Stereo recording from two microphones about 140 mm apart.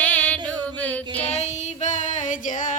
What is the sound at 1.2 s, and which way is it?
Child singing, 50° left (ahead or behind).